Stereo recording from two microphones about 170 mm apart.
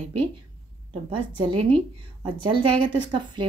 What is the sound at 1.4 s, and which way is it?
A woman's voice, 35° right (ahead or behind).